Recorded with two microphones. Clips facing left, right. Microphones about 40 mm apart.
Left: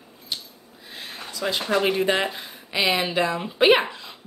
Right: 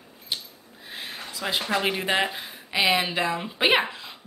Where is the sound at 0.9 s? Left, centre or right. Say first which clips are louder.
Left 1 dB; centre.